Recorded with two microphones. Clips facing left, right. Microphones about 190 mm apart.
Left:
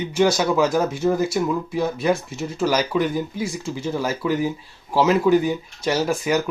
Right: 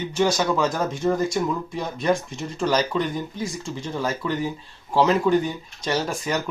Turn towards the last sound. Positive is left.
turn(degrees=10)  # may be behind; listen again after turning